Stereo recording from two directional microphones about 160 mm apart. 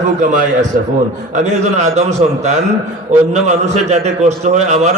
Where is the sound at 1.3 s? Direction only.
45° right (ahead or behind).